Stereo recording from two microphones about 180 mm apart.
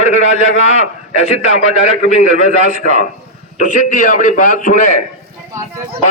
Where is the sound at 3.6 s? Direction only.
45° left (ahead or behind).